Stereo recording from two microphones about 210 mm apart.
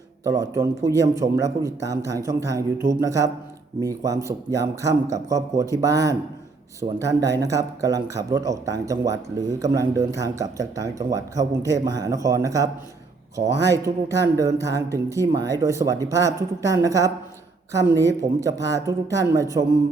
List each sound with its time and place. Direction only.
0.3 s speech: 15° right (ahead or behind)
13.8 s speech: 15° right (ahead or behind)